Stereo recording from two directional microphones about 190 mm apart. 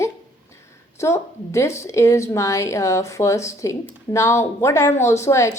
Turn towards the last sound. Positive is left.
turn(degrees=15)  # may be behind; listen again after turning